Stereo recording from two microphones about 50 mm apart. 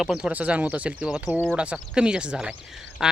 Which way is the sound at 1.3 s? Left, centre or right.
Right.